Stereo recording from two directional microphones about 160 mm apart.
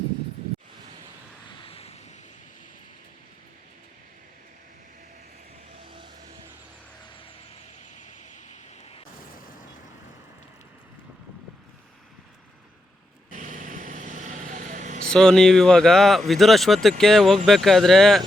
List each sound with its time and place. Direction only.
1.6 s vehicle: 40° left (ahead or behind)
5.8 s music: 35° right (ahead or behind)
13.3 s vehicle: 50° right (ahead or behind)
15.1 s speech: 5° left (ahead or behind)